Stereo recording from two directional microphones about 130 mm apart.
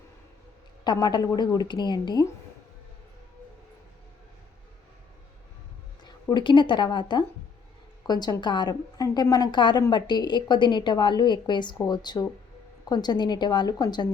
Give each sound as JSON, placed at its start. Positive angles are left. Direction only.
{"t": 0.9, "sound": "a woman's voice", "side_deg": 35}
{"t": 6.3, "sound": "a woman's voice", "side_deg": 40}